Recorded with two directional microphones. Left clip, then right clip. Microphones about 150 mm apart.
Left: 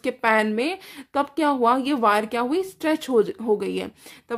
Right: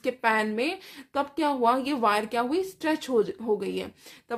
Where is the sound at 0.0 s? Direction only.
35° left (ahead or behind).